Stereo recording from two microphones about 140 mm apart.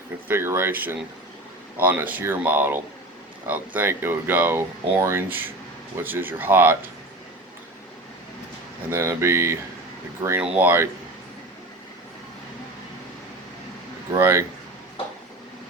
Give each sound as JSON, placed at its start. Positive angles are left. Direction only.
{"t": 0.3, "sound": "speech", "side_deg": -15}
{"t": 8.9, "sound": "speech", "side_deg": -20}
{"t": 14.1, "sound": "speech", "side_deg": -20}